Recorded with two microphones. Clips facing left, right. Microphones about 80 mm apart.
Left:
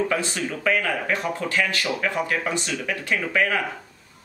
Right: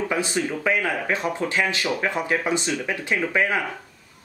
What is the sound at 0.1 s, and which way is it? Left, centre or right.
A man's voice, centre.